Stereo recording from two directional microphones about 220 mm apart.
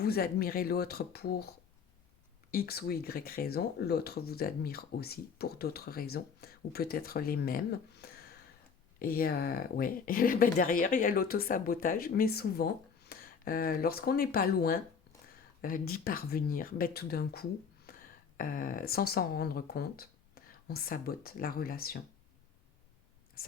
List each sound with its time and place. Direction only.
0.0 s speech: 45° left (ahead or behind)
23.4 s whispering: 45° left (ahead or behind)